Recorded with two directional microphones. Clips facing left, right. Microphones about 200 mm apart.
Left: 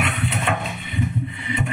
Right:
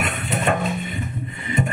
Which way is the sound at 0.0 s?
45° right (ahead or behind).